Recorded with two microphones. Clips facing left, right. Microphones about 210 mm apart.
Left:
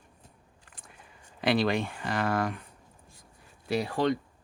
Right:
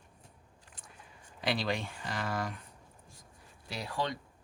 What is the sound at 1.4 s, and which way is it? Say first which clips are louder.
Speech: left 7 dB; 60° left (ahead or behind).